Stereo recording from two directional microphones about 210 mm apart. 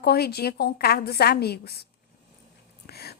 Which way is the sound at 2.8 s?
50° left (ahead or behind).